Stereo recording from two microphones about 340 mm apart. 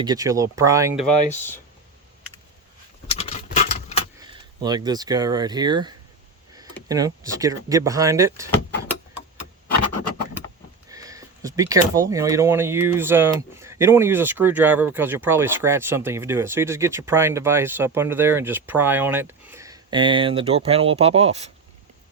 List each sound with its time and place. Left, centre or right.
0.0 s speech: centre
3.1 s a sound: centre
4.2 s speech: centre
10.8 s speech: centre